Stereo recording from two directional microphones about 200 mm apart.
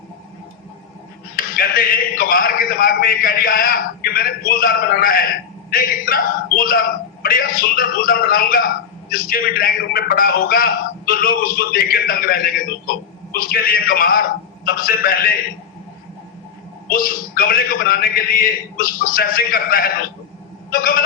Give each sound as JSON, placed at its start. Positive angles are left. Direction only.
{"t": 1.5, "sound": "a man's voice", "side_deg": 45}
{"t": 16.9, "sound": "a man's voice", "side_deg": 45}
{"t": 20.7, "sound": "a sound", "side_deg": 45}